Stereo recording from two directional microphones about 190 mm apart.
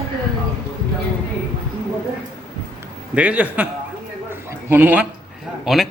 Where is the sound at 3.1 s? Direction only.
5° right (ahead or behind).